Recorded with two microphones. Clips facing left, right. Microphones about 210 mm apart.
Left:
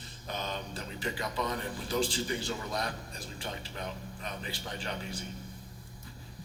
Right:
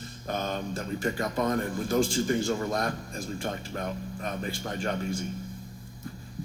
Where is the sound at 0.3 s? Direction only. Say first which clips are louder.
Right 6 dB; 50° right (ahead or behind).